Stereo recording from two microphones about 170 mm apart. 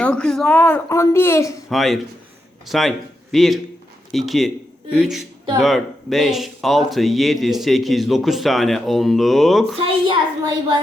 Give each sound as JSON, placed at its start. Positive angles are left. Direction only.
{"t": 0.0, "sound": "speech", "side_deg": 5}
{"t": 1.7, "sound": "speech", "side_deg": 0}
{"t": 9.7, "sound": "a child's voice", "side_deg": -30}